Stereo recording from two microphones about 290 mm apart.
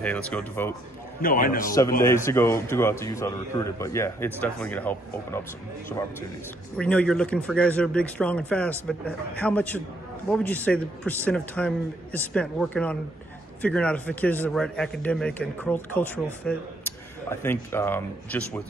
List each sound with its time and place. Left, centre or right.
0.0 s speech: centre
1.2 s a man's voice: left
2.0 s a man's voice: centre
6.8 s speech: centre